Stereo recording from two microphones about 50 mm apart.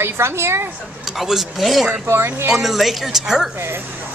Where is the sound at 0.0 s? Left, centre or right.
Right.